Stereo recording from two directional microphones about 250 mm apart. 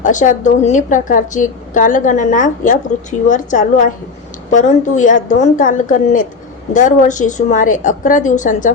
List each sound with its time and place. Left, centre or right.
0.0 s a woman's voice: left